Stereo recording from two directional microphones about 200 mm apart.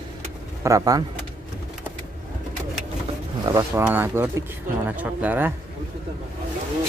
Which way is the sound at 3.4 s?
20° right (ahead or behind).